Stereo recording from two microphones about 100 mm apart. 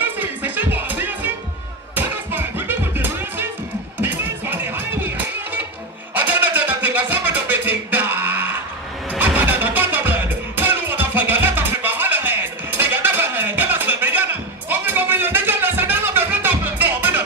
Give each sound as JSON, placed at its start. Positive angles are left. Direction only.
{"t": 0.0, "sound": "music", "side_deg": -20}
{"t": 6.1, "sound": "a sound", "side_deg": -15}
{"t": 9.2, "sound": "music", "side_deg": -15}